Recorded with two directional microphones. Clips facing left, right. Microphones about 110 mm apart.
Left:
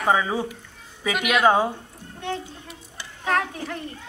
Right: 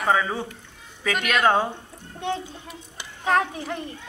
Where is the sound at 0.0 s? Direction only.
10° left (ahead or behind).